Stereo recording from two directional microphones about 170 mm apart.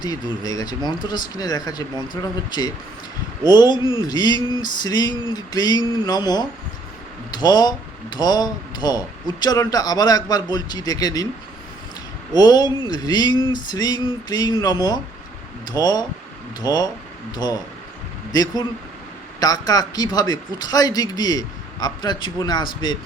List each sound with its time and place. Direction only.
0.0 s a man's voice: 25° left (ahead or behind)
3.8 s speech: 20° right (ahead or behind)
4.0 s a man's voice: 25° left (ahead or behind)
12.3 s a man's voice: 25° left (ahead or behind)